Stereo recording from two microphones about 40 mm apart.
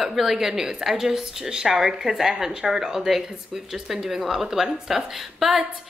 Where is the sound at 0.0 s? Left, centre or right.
Centre.